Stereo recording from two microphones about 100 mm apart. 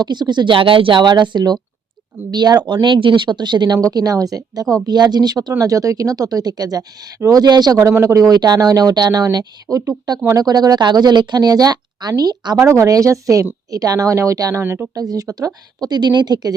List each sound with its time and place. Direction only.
0.0 s speech: 45° right (ahead or behind)
3.9 s speech: 35° right (ahead or behind)
7.8 s speech: 25° right (ahead or behind)
14.6 s speech: 20° right (ahead or behind)
14.9 s speech: 35° right (ahead or behind)